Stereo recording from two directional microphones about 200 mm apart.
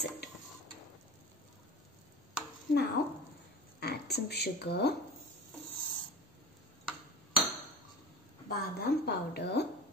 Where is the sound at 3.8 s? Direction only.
55° left (ahead or behind).